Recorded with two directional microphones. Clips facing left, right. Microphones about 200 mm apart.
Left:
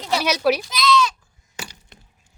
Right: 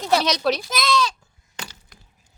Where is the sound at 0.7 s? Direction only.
50° right (ahead or behind).